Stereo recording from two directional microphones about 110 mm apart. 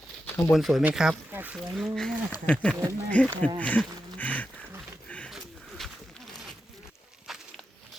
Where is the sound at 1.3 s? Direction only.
15° right (ahead or behind).